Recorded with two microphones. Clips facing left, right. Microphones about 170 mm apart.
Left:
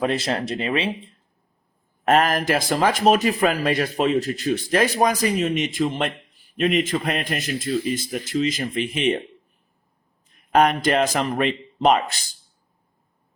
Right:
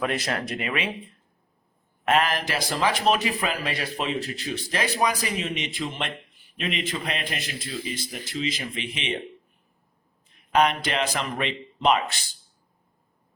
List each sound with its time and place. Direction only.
0.0 s speech: 30° left (ahead or behind)
2.0 s a man's voice: 45° left (ahead or behind)
10.5 s a man's voice: 45° left (ahead or behind)